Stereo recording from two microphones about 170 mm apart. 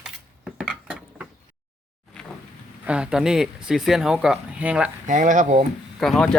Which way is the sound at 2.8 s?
5° right (ahead or behind).